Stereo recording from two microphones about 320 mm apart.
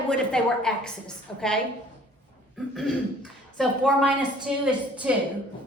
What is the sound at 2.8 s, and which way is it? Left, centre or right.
A woman's voice, centre.